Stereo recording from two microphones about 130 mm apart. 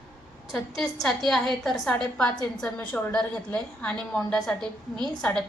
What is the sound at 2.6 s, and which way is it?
A woman's voice, 10° left (ahead or behind).